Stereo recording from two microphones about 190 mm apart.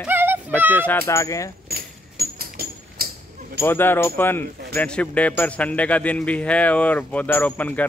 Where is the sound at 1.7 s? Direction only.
50° right (ahead or behind).